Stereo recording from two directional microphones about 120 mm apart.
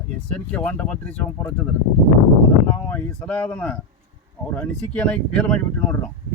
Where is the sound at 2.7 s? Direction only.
15° left (ahead or behind).